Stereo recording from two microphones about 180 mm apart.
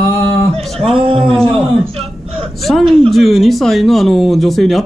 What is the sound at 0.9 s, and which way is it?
Speech, 30° right (ahead or behind).